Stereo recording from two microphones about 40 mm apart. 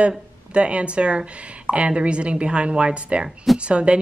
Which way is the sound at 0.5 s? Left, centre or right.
Right.